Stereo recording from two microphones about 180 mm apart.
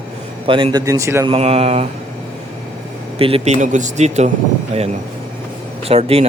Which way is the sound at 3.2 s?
30° right (ahead or behind).